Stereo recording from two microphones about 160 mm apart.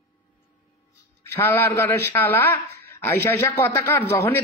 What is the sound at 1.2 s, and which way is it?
A man's voice, 15° left (ahead or behind).